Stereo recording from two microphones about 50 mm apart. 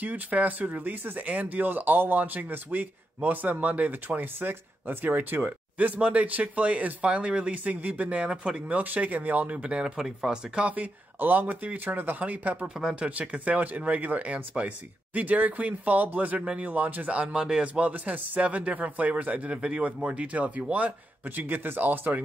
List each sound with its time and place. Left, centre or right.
0.0 s speech: right
8.3 s speech: centre
8.7 s speech: right
10.0 s speech: centre
10.5 s speech: right
12.6 s a man's voice: centre; by 16.3 s right
16.3 s a man's voice: right
16.6 s speech: right
17.1 s a man's voice: centre; by 22.2 s right